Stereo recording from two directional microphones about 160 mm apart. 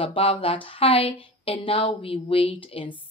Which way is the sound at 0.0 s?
35° left (ahead or behind).